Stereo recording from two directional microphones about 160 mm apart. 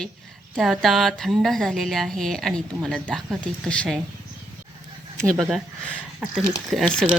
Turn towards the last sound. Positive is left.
turn(degrees=0)  # may be behind; listen again after turning